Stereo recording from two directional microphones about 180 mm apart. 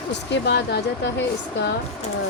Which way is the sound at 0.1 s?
70° left (ahead or behind).